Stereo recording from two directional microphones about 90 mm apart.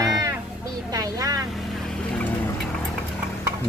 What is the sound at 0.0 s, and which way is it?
Vehicle, 40° right (ahead or behind).